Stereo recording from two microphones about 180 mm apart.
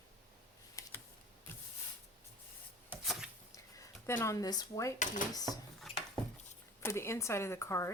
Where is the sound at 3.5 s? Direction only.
15° left (ahead or behind).